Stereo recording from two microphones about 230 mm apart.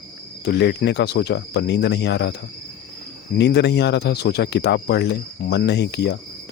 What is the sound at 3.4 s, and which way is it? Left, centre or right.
Speech, left.